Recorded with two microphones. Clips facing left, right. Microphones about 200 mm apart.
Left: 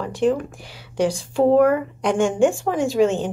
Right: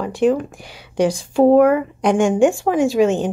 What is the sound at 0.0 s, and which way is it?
Speech, 15° right (ahead or behind).